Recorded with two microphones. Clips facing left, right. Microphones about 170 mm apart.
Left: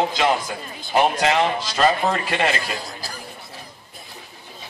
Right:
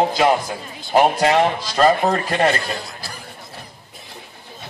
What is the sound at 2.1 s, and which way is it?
Speech, 40° right (ahead or behind).